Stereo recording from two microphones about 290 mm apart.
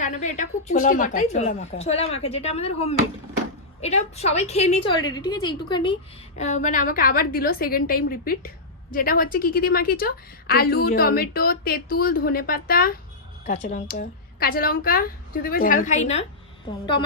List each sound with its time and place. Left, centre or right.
0.0 s a woman's voice: left